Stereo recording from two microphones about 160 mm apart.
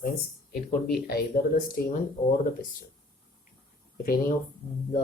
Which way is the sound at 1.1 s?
70° left (ahead or behind).